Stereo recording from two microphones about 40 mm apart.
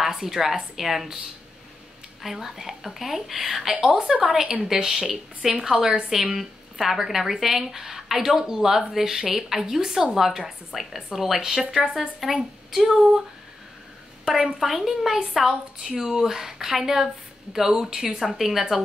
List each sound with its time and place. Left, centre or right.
0.0 s a woman's voice: centre
2.2 s a woman's voice: centre
14.2 s a woman's voice: centre
14.6 s a woman's voice: centre